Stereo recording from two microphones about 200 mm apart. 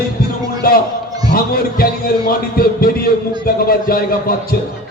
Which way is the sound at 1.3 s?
45° left (ahead or behind).